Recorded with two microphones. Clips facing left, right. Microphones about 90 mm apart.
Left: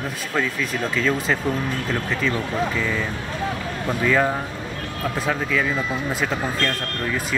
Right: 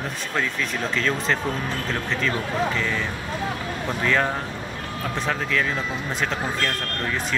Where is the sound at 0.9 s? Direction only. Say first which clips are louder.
Left 2 dB; 5° left (ahead or behind).